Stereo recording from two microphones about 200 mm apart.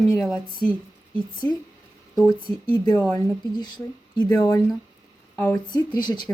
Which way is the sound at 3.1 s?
20° left (ahead or behind).